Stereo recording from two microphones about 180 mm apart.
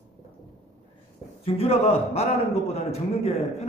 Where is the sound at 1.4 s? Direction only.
35° left (ahead or behind).